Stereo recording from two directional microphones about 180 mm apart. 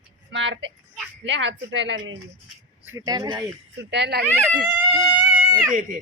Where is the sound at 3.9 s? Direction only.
70° right (ahead or behind).